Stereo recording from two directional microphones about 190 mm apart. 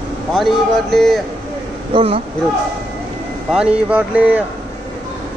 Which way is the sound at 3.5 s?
5° right (ahead or behind).